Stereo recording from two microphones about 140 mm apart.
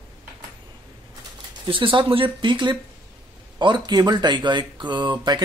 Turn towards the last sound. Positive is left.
turn(degrees=-35)  # may be behind; listen again after turning